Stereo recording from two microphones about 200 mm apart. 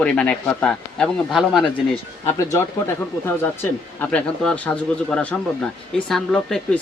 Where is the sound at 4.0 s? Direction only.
5° left (ahead or behind).